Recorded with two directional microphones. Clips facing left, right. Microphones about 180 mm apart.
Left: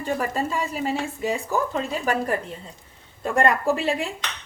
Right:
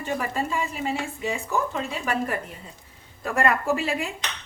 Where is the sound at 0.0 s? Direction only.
35° left (ahead or behind).